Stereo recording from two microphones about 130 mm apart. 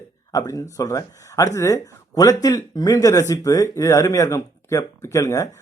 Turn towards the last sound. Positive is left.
turn(degrees=25)  # may be behind; listen again after turning